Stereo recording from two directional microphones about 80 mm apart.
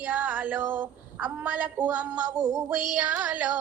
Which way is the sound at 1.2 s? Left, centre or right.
Centre.